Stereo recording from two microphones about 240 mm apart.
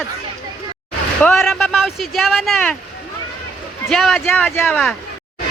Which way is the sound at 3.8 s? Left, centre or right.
Centre.